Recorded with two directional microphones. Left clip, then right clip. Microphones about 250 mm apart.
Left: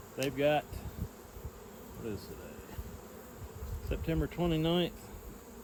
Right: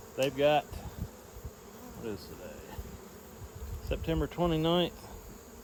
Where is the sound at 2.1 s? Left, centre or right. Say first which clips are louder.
Right 2 dB; right.